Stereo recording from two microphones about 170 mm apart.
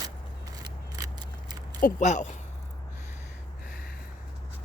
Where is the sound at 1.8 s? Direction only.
50° left (ahead or behind).